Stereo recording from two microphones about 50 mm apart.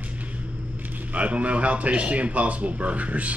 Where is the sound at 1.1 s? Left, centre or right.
Right.